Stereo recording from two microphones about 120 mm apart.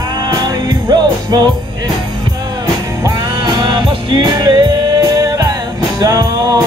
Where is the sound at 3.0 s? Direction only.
35° right (ahead or behind).